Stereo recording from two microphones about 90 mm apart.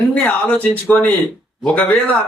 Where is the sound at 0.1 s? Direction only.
15° left (ahead or behind).